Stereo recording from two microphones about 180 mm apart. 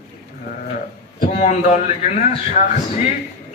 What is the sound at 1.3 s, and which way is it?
Speech, 40° left (ahead or behind).